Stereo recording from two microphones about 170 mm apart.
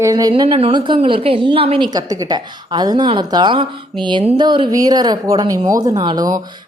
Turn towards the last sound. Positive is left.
turn(degrees=-25)  # may be behind; listen again after turning